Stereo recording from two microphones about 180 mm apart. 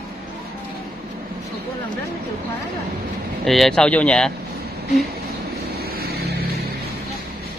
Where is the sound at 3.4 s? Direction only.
Centre (ahead or behind).